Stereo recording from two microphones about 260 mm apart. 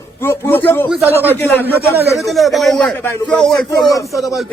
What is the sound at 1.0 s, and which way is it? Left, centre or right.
Speech, centre.